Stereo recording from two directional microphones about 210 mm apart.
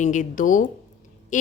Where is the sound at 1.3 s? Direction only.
35° left (ahead or behind).